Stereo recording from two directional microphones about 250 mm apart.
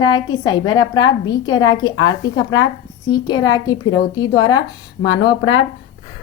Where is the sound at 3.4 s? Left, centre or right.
Centre.